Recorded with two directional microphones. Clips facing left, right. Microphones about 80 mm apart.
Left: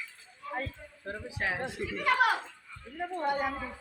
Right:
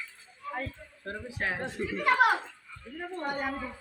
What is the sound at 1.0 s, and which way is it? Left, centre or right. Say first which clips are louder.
Speech: right 1 dB; centre.